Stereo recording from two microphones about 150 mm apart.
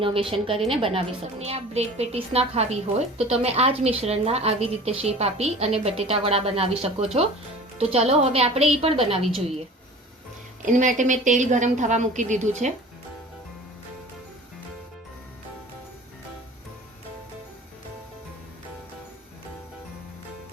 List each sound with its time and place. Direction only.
0.0 s a woman's voice: 35° right (ahead or behind)
10.7 s a woman's voice: 60° right (ahead or behind)